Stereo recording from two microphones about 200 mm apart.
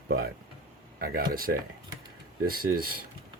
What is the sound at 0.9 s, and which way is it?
Speech, 50° right (ahead or behind).